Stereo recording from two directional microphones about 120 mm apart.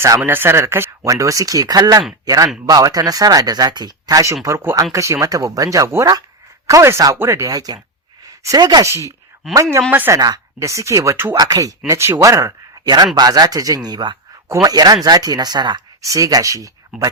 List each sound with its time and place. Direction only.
0.0 s speech: 20° right (ahead or behind)
10.2 s speech: 30° right (ahead or behind)
16.9 s speech: centre (ahead or behind)